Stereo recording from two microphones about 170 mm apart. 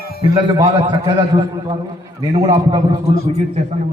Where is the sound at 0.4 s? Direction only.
25° right (ahead or behind).